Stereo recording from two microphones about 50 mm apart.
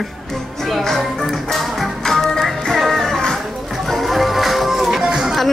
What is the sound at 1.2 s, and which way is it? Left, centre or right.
Organ, centre.